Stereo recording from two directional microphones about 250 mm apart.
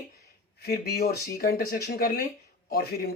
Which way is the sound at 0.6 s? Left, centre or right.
Left.